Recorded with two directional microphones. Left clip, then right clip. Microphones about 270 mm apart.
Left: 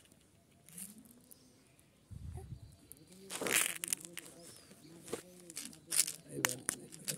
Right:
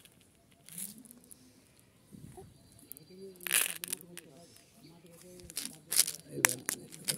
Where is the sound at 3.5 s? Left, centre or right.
Centre.